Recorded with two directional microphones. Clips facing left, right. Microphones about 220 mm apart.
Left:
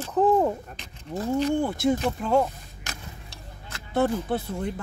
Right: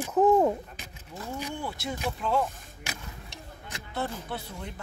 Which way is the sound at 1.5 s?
50° left (ahead or behind).